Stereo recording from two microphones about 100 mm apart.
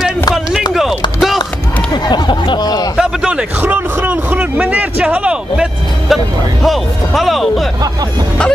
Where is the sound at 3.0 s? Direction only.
5° right (ahead or behind).